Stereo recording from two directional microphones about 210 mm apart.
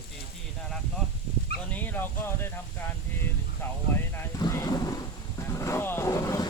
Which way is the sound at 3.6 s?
10° left (ahead or behind).